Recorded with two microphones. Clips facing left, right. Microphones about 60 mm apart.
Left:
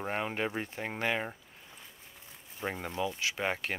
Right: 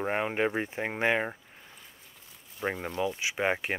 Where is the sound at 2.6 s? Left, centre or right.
Centre.